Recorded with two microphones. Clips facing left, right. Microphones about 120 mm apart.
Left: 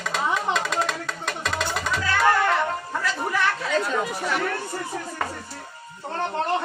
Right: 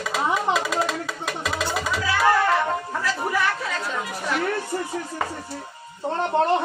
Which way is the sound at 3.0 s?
Centre (ahead or behind).